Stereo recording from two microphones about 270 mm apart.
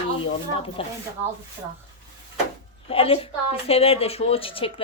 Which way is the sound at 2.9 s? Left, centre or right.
Left.